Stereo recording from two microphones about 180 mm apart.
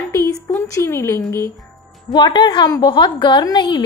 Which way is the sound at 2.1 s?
25° left (ahead or behind).